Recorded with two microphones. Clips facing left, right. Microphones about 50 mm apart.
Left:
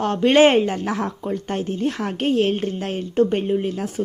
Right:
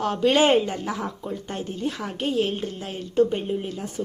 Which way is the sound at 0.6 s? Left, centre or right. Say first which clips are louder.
Left 5 dB; left.